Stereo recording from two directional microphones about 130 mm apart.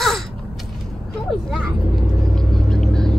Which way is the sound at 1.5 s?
5° left (ahead or behind).